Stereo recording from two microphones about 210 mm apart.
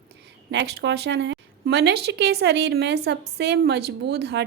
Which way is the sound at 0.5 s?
55° right (ahead or behind).